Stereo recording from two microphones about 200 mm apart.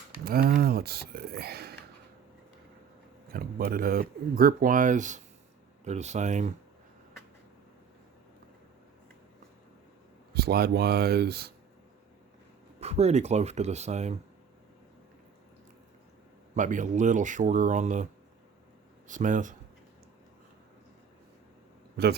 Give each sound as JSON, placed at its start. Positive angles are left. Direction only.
{"t": 0.3, "sound": "speech", "side_deg": -45}
{"t": 3.3, "sound": "speech", "side_deg": -50}
{"t": 10.3, "sound": "speech", "side_deg": -50}
{"t": 12.8, "sound": "speech", "side_deg": -30}
{"t": 16.6, "sound": "speech", "side_deg": -40}